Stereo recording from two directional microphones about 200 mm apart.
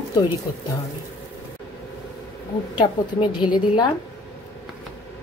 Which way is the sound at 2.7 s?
25° left (ahead or behind).